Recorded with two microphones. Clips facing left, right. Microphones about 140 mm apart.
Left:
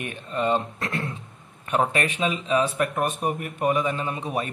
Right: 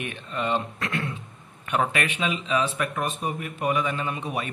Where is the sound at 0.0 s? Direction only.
40° left (ahead or behind).